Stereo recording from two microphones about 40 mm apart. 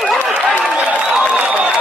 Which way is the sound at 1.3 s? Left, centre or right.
Right.